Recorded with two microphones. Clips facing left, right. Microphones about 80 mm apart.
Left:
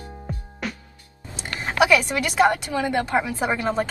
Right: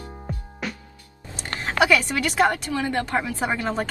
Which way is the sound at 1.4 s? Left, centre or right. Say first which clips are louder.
Left 1 dB; centre.